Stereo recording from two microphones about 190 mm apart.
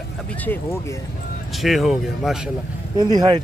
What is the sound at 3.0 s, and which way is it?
Speech, 20° right (ahead or behind).